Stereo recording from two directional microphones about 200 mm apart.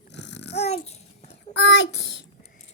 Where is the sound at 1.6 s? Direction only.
60° left (ahead or behind).